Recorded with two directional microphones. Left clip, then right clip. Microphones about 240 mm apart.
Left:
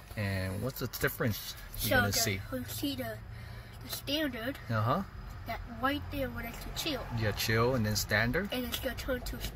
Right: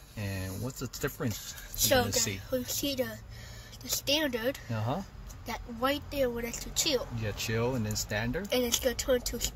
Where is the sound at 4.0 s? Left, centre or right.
Right.